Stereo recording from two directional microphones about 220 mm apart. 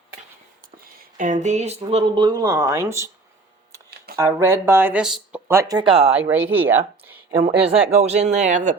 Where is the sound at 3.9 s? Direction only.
45° right (ahead or behind).